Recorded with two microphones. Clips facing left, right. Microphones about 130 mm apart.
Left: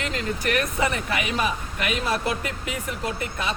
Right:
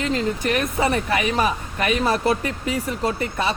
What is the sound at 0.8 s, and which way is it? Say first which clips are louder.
Speech: right 5 dB; 40° right (ahead or behind).